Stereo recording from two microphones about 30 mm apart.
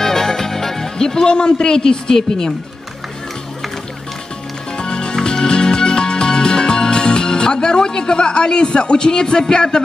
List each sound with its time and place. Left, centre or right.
0.0 s speech: centre
4.7 s music: left